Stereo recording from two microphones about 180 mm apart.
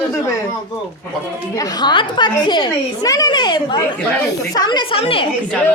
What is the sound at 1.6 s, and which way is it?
A woman's voice, 25° left (ahead or behind).